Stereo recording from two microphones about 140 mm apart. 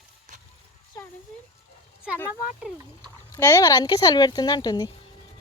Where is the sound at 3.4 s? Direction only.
20° left (ahead or behind).